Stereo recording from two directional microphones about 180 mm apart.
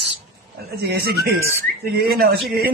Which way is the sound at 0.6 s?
60° right (ahead or behind).